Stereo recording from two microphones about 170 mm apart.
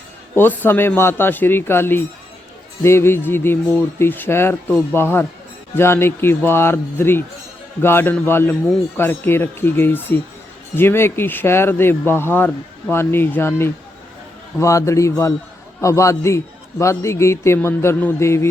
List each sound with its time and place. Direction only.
0.3 s a man's voice: 10° left (ahead or behind)